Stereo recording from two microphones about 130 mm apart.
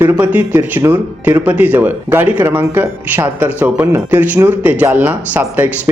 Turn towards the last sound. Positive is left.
turn(degrees=-15)  # may be behind; listen again after turning